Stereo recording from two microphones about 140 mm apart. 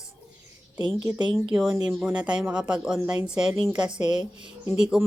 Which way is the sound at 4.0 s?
30° right (ahead or behind).